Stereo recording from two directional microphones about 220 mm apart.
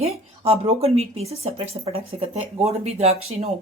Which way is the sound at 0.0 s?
25° right (ahead or behind).